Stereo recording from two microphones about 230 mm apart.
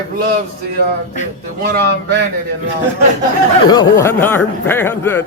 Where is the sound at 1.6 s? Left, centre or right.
Right.